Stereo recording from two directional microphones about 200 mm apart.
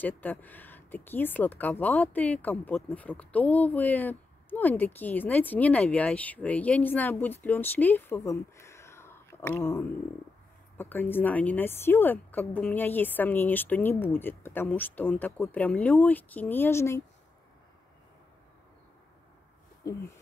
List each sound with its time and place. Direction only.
0.0 s speech: 10° left (ahead or behind)
19.8 s speech: 15° left (ahead or behind)